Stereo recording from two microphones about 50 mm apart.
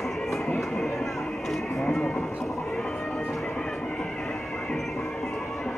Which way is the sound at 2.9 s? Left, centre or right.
Centre.